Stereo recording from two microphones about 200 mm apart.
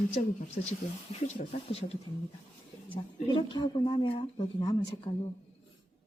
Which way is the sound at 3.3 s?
25° left (ahead or behind).